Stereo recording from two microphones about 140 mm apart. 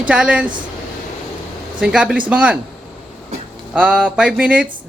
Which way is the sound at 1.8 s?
5° right (ahead or behind).